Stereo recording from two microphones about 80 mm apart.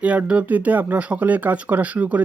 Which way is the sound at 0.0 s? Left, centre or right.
Centre.